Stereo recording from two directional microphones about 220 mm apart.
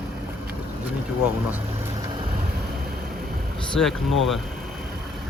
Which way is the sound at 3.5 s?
5° left (ahead or behind).